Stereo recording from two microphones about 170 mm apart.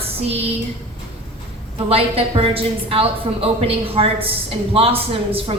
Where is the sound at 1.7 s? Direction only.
35° right (ahead or behind).